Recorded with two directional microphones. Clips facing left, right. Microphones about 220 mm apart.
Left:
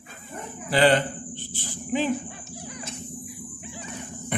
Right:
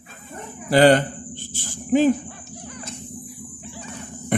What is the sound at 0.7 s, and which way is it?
Speech, 45° right (ahead or behind).